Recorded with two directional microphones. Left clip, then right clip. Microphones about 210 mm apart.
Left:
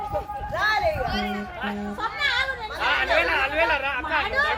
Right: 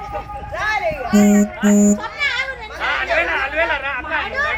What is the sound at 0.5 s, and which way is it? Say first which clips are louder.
Speech: right 2 dB; 5° right (ahead or behind).